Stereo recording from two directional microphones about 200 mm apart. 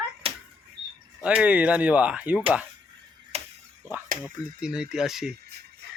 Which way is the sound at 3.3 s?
30° right (ahead or behind).